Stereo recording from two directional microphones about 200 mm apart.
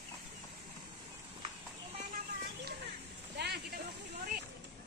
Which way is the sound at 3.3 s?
55° right (ahead or behind).